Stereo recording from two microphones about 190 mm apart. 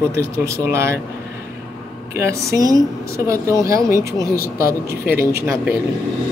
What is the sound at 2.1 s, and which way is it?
Speech, 15° right (ahead or behind).